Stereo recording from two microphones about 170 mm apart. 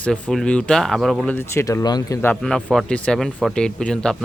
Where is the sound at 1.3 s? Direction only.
15° left (ahead or behind).